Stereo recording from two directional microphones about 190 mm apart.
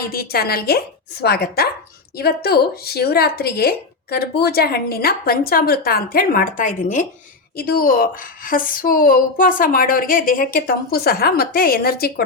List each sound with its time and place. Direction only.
0.0 s speech: 50° left (ahead or behind)
7.5 s speech: 50° left (ahead or behind)